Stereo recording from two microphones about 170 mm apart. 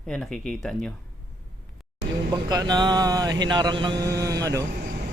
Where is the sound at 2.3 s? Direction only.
20° right (ahead or behind).